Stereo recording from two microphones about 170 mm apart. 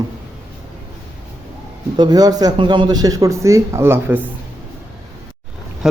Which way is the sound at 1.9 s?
25° right (ahead or behind).